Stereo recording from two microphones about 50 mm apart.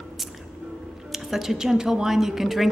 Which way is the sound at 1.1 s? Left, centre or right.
Centre.